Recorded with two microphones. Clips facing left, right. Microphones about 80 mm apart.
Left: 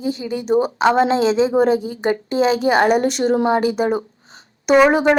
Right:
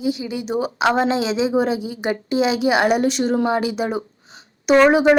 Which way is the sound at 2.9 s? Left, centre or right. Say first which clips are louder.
Left 2 dB; left.